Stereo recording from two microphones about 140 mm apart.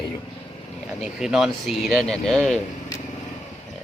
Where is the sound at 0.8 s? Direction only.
5° right (ahead or behind).